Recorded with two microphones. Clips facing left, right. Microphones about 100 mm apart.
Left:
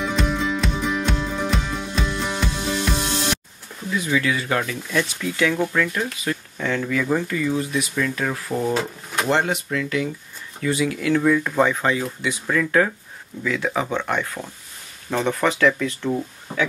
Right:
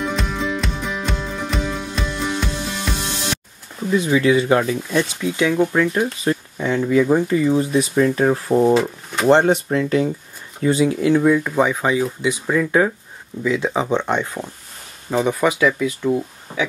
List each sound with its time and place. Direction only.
0.0 s music: centre (ahead or behind)
4.0 s speech: 25° right (ahead or behind)
8.7 s speech: centre (ahead or behind)
9.3 s speech: 35° right (ahead or behind)
15.0 s speech: 10° right (ahead or behind)